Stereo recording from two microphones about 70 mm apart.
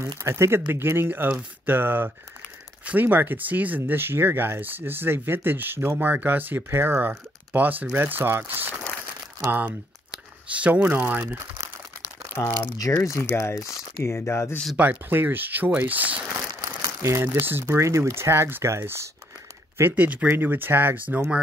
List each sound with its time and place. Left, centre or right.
0.2 s speech: right
12.4 s speech: left
12.7 s speech: left
14.8 s speech: right
16.6 s speech: right
19.8 s speech: right